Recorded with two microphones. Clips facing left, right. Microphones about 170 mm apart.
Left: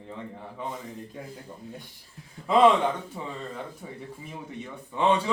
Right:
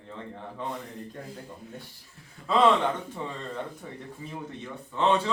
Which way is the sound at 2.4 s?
30° left (ahead or behind).